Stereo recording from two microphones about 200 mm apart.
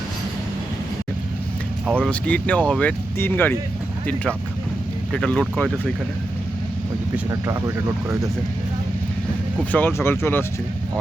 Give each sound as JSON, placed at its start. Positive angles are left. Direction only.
{"t": 2.0, "sound": "speech", "side_deg": 5}
{"t": 7.3, "sound": "speech", "side_deg": -15}
{"t": 9.7, "sound": "speech", "side_deg": 10}